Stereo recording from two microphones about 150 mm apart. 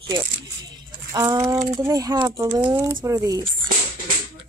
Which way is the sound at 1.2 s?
20° right (ahead or behind).